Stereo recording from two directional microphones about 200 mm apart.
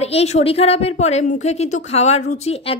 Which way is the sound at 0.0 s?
30° left (ahead or behind).